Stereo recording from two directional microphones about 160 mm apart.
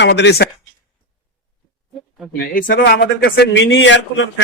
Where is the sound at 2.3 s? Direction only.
70° left (ahead or behind).